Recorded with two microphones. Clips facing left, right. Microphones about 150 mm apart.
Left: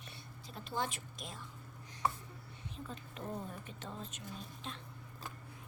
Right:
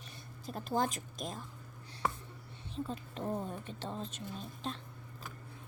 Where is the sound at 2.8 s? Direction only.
30° right (ahead or behind).